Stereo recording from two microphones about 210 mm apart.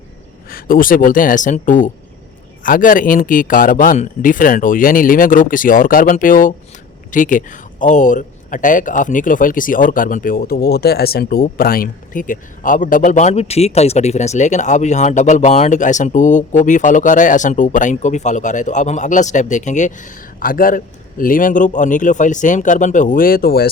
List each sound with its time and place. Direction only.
0.5 s a man's voice: 40° left (ahead or behind)